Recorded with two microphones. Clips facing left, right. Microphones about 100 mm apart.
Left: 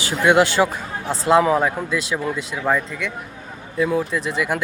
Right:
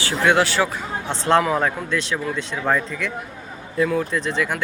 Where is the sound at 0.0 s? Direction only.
15° left (ahead or behind).